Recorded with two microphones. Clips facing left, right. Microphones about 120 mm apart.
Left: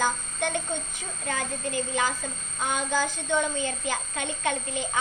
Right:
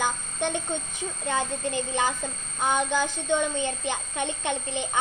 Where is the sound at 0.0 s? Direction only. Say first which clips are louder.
Even; 20° right (ahead or behind).